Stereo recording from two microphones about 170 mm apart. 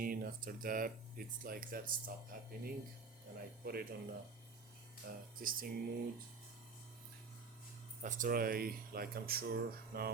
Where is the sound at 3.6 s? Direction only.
60° right (ahead or behind).